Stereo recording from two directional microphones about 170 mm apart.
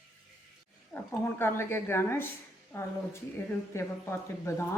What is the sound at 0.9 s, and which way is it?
A woman's voice, 15° left (ahead or behind).